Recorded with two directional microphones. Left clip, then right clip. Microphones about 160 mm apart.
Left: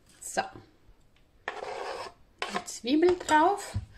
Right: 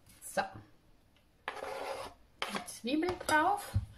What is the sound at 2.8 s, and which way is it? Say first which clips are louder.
Speech: left 9 dB; 55° left (ahead or behind).